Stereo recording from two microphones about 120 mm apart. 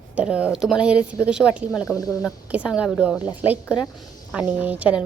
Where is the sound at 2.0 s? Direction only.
30° left (ahead or behind).